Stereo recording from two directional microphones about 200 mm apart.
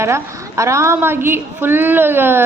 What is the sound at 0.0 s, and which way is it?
A woman's voice, 15° right (ahead or behind).